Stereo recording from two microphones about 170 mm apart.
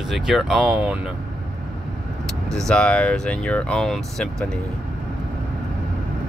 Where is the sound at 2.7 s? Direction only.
5° left (ahead or behind).